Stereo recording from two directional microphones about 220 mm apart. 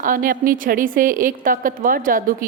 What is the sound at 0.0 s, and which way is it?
A woman's voice, 40° right (ahead or behind).